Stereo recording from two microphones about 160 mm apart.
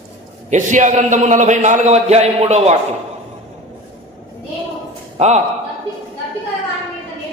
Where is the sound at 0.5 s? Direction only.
50° right (ahead or behind).